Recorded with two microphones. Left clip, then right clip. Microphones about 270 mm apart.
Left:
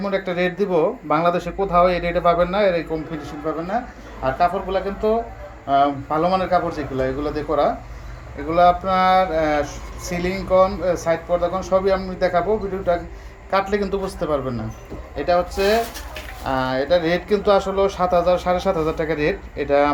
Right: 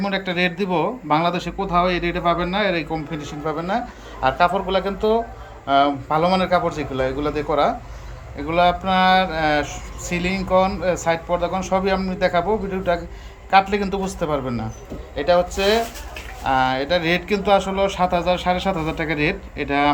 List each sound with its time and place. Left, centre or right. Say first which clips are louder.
0.0 s a man's voice: even; centre
9.1 s mantra: left 1 dB; left
10.2 s a man's voice: left 2 dB; centre